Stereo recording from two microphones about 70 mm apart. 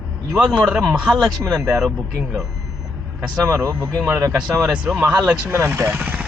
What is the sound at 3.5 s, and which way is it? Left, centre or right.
Speech, right.